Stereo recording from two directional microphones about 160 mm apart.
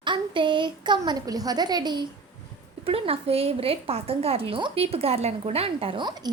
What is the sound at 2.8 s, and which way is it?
A woman's voice, 35° right (ahead or behind).